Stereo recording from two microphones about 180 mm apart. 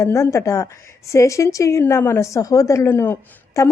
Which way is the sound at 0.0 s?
15° left (ahead or behind).